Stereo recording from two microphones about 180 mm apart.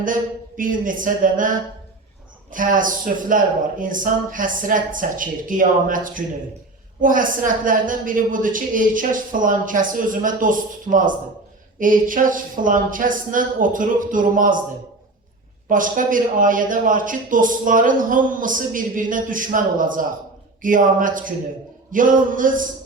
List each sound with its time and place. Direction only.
0.0 s a man's voice: 50° right (ahead or behind)
15.7 s a man's voice: 50° right (ahead or behind)